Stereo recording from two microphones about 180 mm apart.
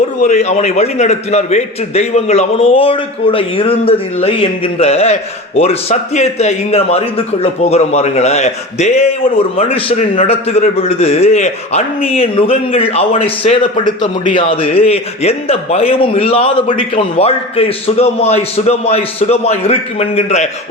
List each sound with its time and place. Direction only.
0.2 s a man's voice: 40° left (ahead or behind)
14.0 s a man's voice: 25° left (ahead or behind)